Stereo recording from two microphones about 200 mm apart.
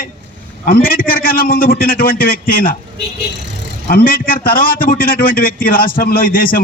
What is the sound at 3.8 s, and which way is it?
A man's voice, 45° left (ahead or behind).